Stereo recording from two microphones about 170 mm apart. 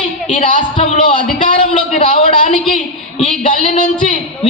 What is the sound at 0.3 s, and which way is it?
A man's voice, 50° left (ahead or behind).